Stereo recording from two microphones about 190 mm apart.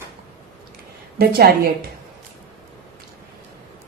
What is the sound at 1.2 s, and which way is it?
Speech, 55° right (ahead or behind).